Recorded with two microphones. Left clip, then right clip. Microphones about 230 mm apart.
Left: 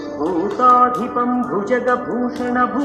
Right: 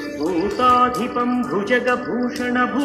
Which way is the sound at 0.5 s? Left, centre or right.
Right.